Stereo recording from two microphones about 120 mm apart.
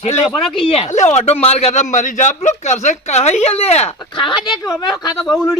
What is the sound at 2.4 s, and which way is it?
Speech, 80° left.